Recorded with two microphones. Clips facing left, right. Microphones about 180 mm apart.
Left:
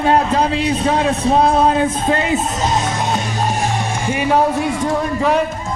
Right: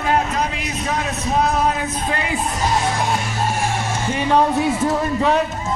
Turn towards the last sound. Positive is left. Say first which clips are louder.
# left 1 dB
turn(degrees=0)  # may be behind; listen again after turning